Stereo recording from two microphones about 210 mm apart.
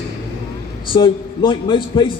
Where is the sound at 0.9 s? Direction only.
25° left (ahead or behind).